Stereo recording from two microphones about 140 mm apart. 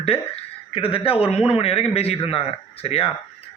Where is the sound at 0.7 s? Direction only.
40° left (ahead or behind).